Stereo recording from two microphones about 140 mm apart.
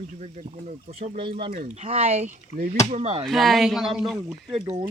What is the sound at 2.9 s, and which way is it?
Speech, 50° right (ahead or behind).